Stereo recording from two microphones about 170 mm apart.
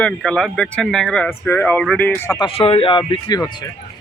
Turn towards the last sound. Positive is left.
turn(degrees=25)  # may be behind; listen again after turning